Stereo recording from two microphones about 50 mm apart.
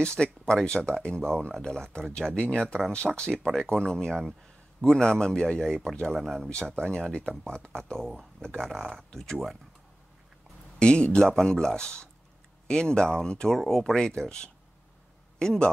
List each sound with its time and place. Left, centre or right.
0.0 s speech: centre
6.1 s speech: centre
6.8 s speech: centre
10.8 s a man's voice: centre